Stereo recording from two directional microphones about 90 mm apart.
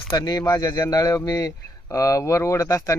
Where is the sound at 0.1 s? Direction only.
50° left (ahead or behind).